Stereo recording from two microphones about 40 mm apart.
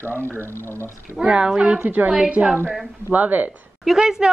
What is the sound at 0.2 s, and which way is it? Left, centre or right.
Speech, right.